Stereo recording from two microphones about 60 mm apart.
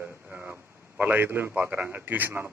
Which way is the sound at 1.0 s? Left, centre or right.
Right.